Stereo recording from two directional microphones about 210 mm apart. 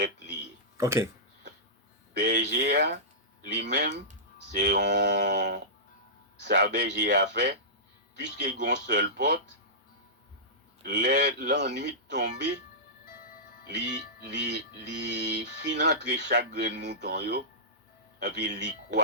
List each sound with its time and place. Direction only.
0.8 s speech: 15° right (ahead or behind)
2.1 s speech: 55° right (ahead or behind)
4.6 s music: 55° right (ahead or behind)
6.4 s a man's voice: 55° right (ahead or behind)
6.7 s music: 55° right (ahead or behind)
8.2 s music: 55° right (ahead or behind)
10.8 s speech: 55° right (ahead or behind)
13.7 s music: 55° right (ahead or behind)
16.6 s speech: 55° right (ahead or behind)
18.2 s music: 55° right (ahead or behind)